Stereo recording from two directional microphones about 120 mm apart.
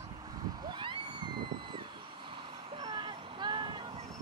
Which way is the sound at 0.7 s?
40° right (ahead or behind).